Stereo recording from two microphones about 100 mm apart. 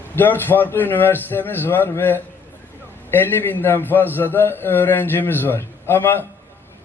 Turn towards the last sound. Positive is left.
turn(degrees=20)  # may be behind; listen again after turning